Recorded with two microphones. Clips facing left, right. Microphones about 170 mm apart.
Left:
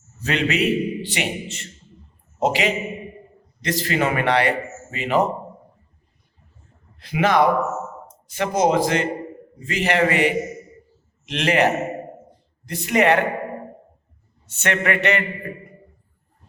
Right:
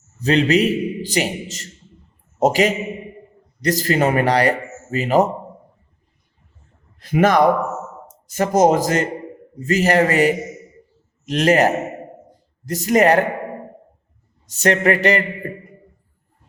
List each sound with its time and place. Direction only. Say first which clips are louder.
0.2 s a man's voice: right 6 dB; 35° right (ahead or behind)
7.0 s a man's voice: right 3 dB; 45° right (ahead or behind)
14.4 s a man's voice: right 6 dB; 35° right (ahead or behind)